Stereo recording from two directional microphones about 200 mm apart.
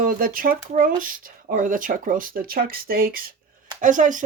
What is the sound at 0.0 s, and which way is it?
Speech, 45° right (ahead or behind).